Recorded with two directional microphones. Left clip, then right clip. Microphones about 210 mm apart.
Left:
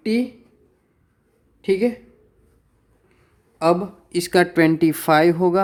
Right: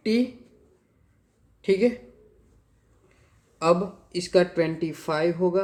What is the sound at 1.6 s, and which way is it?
Speech, 20° left (ahead or behind).